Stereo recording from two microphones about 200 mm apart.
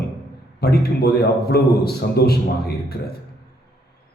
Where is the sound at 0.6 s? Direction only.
50° left (ahead or behind).